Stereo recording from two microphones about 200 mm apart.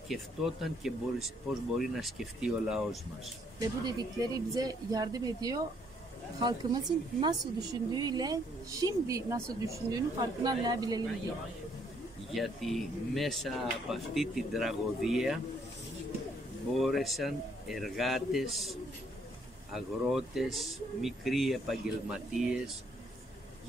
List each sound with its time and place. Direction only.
0.1 s speech: centre (ahead or behind)
3.6 s a woman's voice: 20° right (ahead or behind)
12.4 s speech: centre (ahead or behind)
16.7 s speech: centre (ahead or behind)